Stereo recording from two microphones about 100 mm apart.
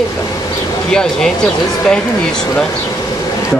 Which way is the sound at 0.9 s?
5° left (ahead or behind).